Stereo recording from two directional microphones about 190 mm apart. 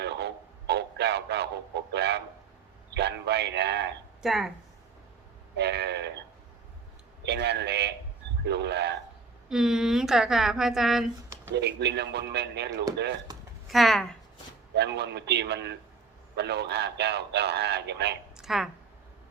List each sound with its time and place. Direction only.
0.0 s radio: 60° right (ahead or behind)
2.9 s a sound: 60° right (ahead or behind)
4.2 s a woman's voice: centre (ahead or behind)
5.5 s train: 60° right (ahead or behind)
7.3 s a man's voice: 60° right (ahead or behind)
9.5 s a woman's voice: centre (ahead or behind)
11.5 s a man's voice: 60° right (ahead or behind)
13.7 s speech: centre (ahead or behind)
14.8 s a man's voice: 65° right (ahead or behind)
18.3 s a woman's voice: centre (ahead or behind)